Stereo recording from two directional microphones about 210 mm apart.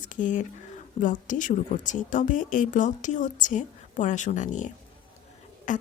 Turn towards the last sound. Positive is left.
turn(degrees=35)  # may be behind; listen again after turning